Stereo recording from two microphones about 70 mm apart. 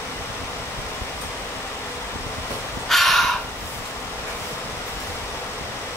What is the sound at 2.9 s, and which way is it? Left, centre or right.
Crow, centre.